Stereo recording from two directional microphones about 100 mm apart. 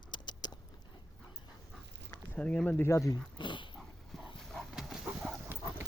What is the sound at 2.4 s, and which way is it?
Speech, 10° left (ahead or behind).